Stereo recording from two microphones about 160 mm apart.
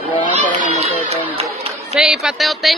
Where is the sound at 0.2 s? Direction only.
55° left (ahead or behind).